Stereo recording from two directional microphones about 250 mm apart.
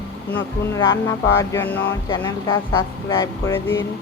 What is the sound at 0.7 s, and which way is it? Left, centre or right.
Speech, centre.